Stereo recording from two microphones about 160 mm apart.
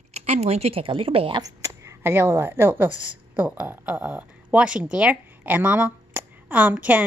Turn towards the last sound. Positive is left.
turn(degrees=-10)  # may be behind; listen again after turning